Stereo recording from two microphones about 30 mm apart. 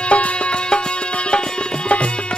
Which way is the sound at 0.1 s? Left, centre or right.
Left.